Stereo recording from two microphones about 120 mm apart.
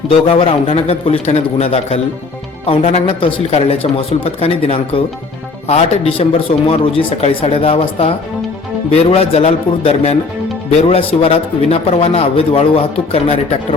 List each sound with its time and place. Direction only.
0.3 s a man's voice: 50° left (ahead or behind)